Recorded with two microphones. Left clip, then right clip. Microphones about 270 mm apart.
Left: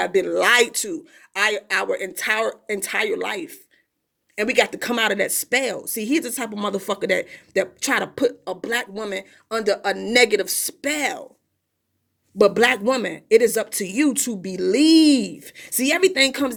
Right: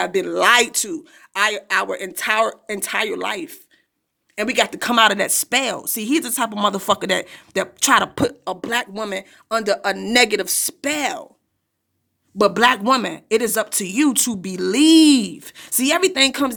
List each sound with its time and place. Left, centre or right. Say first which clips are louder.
0.0 s speech: right 1 dB; centre
12.4 s speech: right 1 dB; centre